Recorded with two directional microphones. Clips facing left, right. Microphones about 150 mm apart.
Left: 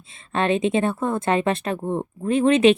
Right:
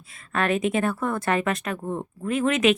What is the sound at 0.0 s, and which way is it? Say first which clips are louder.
A woman's voice: left 3 dB; 25° left (ahead or behind).